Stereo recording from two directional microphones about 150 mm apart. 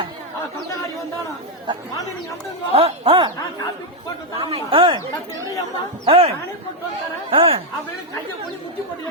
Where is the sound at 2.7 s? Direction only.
35° right (ahead or behind).